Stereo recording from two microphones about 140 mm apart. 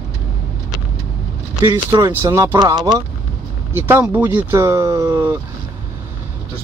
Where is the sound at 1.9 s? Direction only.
25° right (ahead or behind).